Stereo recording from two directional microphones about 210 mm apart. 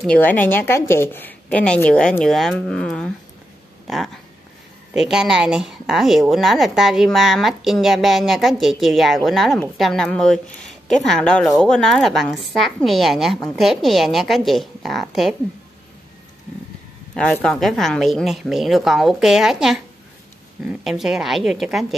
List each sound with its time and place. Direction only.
0.0 s a woman's voice: 5° left (ahead or behind)
17.1 s a woman's voice: 5° left (ahead or behind)